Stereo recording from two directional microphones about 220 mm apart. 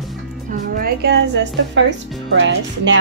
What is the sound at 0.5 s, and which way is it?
A woman's voice, 40° right (ahead or behind).